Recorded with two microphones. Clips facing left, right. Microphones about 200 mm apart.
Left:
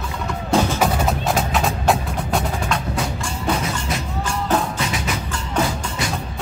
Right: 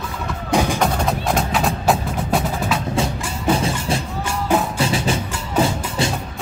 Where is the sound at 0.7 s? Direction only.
5° left (ahead or behind).